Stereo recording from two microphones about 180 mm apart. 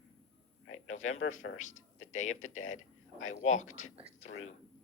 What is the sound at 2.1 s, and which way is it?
Speech, 40° left (ahead or behind).